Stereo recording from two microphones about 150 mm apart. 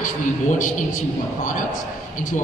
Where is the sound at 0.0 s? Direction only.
60° left (ahead or behind).